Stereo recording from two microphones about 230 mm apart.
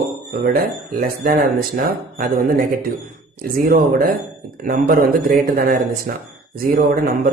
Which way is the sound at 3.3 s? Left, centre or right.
Right.